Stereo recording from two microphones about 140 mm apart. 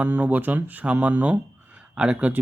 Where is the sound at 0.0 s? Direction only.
10° right (ahead or behind).